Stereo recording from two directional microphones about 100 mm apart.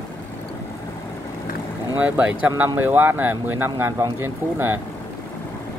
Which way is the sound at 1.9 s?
15° right (ahead or behind).